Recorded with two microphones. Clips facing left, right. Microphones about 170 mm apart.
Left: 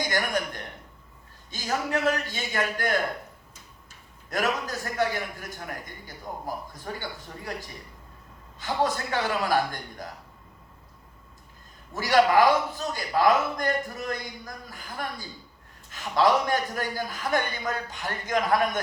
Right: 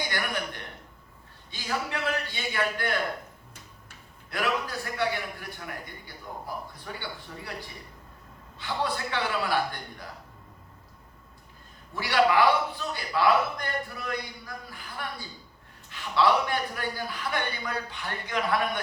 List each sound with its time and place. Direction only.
0.1 s a sound: 45° left (ahead or behind)
1.5 s a man's voice: 45° left (ahead or behind)
4.3 s a man's voice: 45° left (ahead or behind)
8.5 s a man's voice: 45° left (ahead or behind)
11.9 s a man's voice: 45° left (ahead or behind)